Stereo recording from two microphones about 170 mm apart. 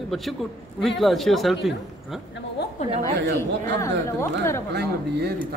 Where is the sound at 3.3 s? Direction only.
15° left (ahead or behind).